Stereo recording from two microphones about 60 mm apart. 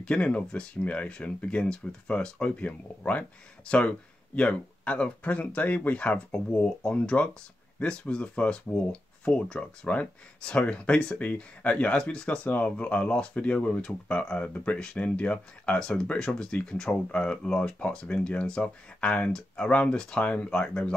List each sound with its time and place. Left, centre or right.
0.0 s speech: centre
12.4 s speech: left